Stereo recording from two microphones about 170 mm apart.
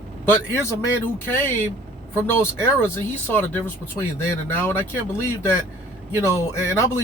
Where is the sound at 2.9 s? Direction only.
10° left (ahead or behind).